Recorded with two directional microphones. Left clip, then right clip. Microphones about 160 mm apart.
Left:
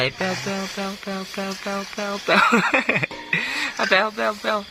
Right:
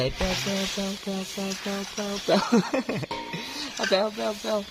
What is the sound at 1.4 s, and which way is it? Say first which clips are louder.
Speech: left 4 dB; 20° left (ahead or behind).